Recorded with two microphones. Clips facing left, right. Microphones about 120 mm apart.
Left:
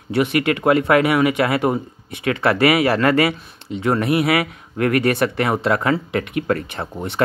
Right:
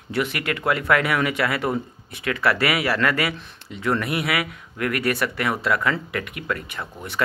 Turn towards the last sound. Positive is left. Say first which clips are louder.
# left 6 dB
turn(degrees=30)  # may be behind; listen again after turning